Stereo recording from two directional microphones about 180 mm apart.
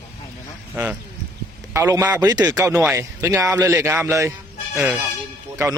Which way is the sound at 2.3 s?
20° right (ahead or behind).